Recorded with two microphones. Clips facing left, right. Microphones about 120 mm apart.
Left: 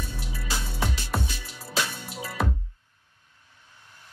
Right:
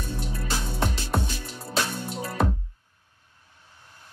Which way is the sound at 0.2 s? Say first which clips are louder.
Right 3 dB; 5° left (ahead or behind).